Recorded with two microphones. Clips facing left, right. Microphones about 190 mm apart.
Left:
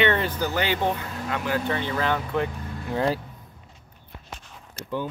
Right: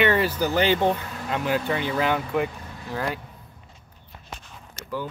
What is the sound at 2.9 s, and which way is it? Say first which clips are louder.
Speech: left 5 dB; 30° left (ahead or behind).